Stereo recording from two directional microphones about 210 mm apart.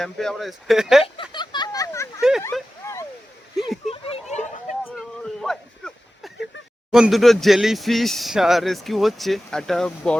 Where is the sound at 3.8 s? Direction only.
30° left (ahead or behind).